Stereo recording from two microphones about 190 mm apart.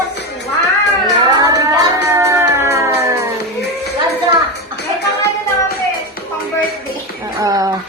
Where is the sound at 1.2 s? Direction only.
20° right (ahead or behind).